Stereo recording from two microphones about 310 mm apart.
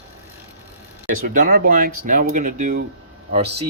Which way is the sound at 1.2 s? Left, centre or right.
Right.